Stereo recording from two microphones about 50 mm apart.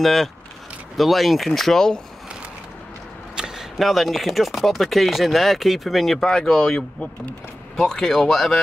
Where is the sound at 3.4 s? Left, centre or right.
Centre.